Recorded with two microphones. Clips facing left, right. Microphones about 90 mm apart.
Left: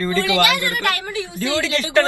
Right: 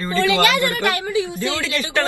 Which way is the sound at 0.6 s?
20° right (ahead or behind).